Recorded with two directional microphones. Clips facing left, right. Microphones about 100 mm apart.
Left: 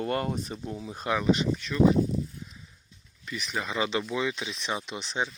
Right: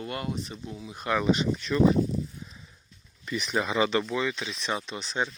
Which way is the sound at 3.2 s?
35° right (ahead or behind).